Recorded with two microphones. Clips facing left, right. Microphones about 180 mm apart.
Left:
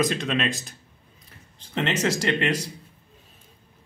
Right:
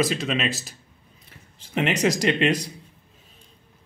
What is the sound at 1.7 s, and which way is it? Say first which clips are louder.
Speech: right 2 dB; 15° right (ahead or behind).